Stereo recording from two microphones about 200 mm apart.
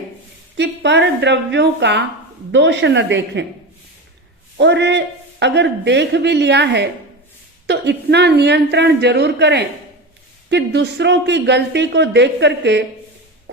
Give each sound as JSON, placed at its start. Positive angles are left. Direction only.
{"t": 0.5, "sound": "speech", "side_deg": -60}
{"t": 4.5, "sound": "speech", "side_deg": -60}